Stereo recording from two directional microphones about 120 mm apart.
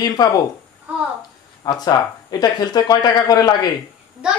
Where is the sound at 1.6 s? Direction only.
35° left (ahead or behind).